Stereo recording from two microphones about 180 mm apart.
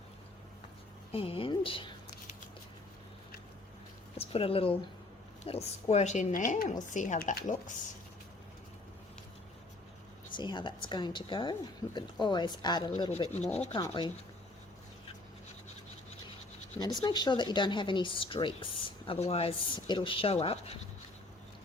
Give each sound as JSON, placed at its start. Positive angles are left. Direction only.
{"t": 1.1, "sound": "speech", "side_deg": 30}
{"t": 4.2, "sound": "a woman's voice", "side_deg": 30}
{"t": 10.3, "sound": "speech", "side_deg": 25}
{"t": 16.8, "sound": "speech", "side_deg": 25}